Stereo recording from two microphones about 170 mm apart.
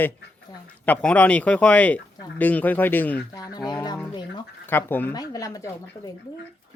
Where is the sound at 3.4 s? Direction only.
25° left (ahead or behind).